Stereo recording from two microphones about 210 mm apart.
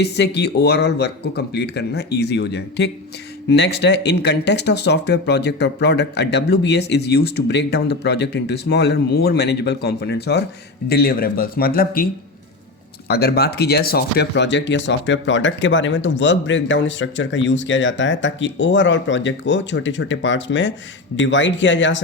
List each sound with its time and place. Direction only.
0.0 s speech: 55° left (ahead or behind)
13.1 s speech: 50° left (ahead or behind)